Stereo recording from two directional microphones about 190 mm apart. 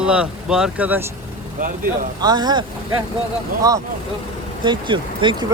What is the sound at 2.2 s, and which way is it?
Speech, 20° right (ahead or behind).